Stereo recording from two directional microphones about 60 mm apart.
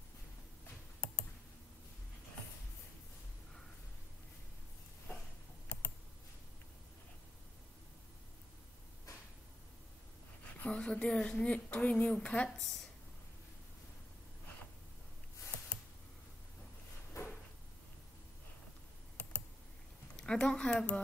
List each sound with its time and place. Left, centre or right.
1.0 s clicking: centre
10.6 s speech: centre
12.4 s a woman's voice: centre
17.1 s drawer open or close: left
20.2 s speech: centre